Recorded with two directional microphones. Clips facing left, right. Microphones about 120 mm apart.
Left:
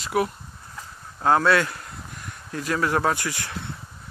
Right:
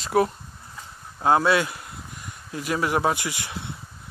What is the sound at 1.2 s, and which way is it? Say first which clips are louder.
Speech: even; 15° right (ahead or behind).